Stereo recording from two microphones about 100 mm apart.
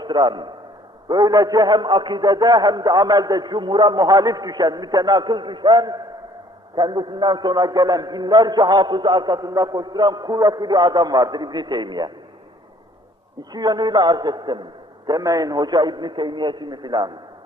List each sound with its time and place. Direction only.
0.0 s a man's voice: 50° right (ahead or behind)
13.5 s a man's voice: 45° right (ahead or behind)